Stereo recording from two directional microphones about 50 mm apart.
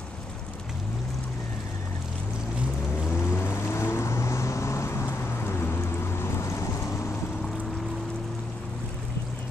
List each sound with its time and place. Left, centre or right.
3.3 s vehicle: left